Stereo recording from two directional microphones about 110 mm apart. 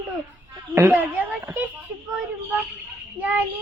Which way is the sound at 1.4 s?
20° right (ahead or behind).